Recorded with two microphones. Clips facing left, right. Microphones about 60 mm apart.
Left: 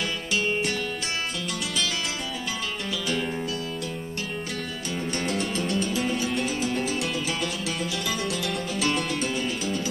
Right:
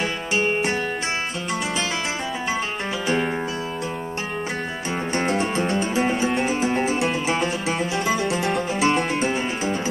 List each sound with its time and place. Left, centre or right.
0.3 s music: right
5.1 s music: right